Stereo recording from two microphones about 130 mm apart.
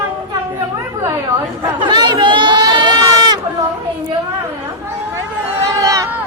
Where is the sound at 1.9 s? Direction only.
35° right (ahead or behind).